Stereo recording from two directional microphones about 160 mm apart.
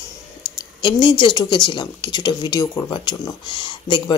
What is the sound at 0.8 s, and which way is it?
Speech, 30° left (ahead or behind).